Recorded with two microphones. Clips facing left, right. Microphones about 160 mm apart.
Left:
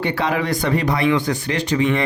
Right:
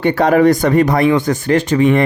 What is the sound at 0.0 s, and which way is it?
Speech, 45° right (ahead or behind).